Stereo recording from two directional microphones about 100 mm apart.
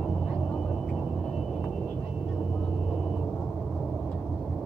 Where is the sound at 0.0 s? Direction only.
5° left (ahead or behind).